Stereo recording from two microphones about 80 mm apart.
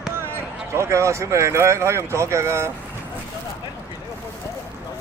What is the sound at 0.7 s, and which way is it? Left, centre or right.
Speech, right.